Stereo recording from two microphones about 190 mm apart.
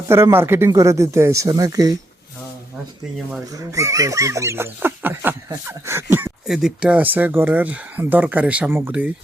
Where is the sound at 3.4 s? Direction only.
15° right (ahead or behind).